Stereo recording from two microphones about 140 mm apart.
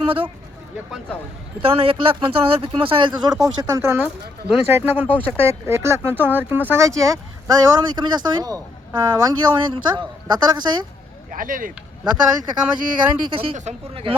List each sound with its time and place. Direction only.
1.6 s speech: 40° right (ahead or behind); by 4.0 s 20° right (ahead or behind)
4.0 s speech: 5° right (ahead or behind)
4.7 s speech: 15° right (ahead or behind); by 10.6 s 30° right (ahead or behind)
11.3 s speech: 80° right
12.0 s speech: 30° right (ahead or behind)